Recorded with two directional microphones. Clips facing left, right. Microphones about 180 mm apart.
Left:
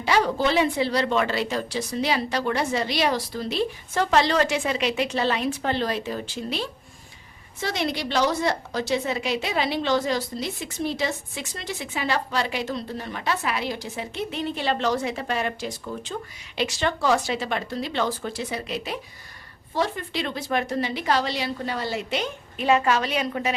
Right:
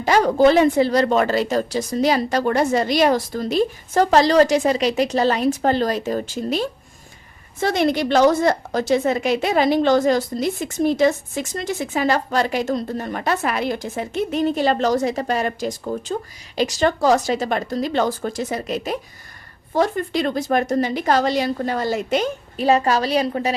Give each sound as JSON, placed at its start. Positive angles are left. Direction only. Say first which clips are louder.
{"t": 0.0, "sound": "a woman's voice", "louder": "right 7 dB", "side_deg": -45}